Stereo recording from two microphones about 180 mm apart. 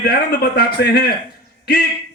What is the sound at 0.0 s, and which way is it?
A man's voice, 60° left (ahead or behind).